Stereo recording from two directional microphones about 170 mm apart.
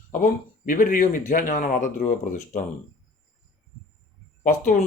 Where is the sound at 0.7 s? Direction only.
55° left (ahead or behind).